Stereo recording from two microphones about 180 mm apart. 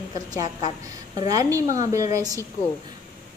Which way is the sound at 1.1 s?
20° right (ahead or behind).